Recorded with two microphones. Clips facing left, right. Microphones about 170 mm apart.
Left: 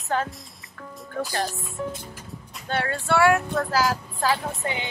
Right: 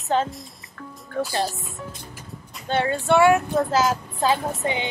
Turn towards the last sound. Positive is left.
turn(degrees=-20)  # may be behind; listen again after turning